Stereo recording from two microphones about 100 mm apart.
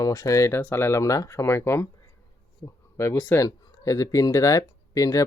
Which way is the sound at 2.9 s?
30° left (ahead or behind).